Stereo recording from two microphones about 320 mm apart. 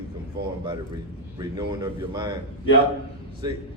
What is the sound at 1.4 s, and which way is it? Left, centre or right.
Speech, centre.